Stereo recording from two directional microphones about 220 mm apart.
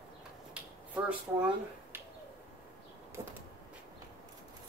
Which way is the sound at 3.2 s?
10° right (ahead or behind).